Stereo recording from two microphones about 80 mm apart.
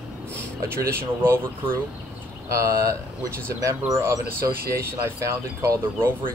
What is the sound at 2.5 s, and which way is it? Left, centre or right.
Speech, right.